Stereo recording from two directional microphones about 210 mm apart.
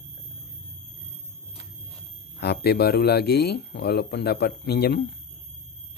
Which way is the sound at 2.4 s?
50° left (ahead or behind).